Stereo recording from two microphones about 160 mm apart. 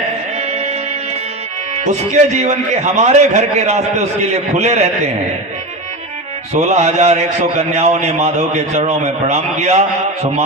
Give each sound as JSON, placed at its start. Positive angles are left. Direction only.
{"t": 0.5, "sound": "music", "side_deg": -40}
{"t": 1.8, "sound": "a man's voice", "side_deg": -45}
{"t": 6.5, "sound": "a man's voice", "side_deg": -40}